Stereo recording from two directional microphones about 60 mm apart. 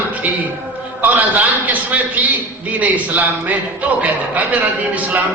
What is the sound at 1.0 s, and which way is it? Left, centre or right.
Speech, right.